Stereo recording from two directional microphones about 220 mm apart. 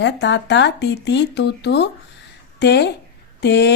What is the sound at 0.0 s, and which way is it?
A woman's voice, 55° left (ahead or behind).